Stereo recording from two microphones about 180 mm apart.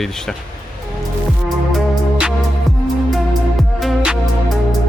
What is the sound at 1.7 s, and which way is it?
Music, centre (ahead or behind).